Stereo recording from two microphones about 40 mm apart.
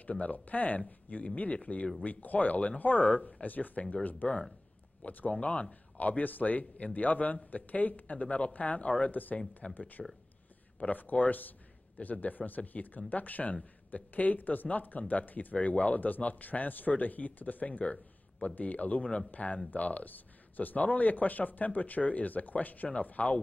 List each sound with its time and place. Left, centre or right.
0.2 s speech: left
3.1 s speech: left
5.3 s speech: left
5.9 s speech: left